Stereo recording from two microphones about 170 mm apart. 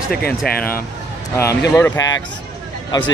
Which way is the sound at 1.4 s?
15° left (ahead or behind).